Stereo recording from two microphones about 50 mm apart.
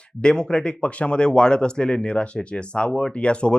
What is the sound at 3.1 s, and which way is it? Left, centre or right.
Speech, left.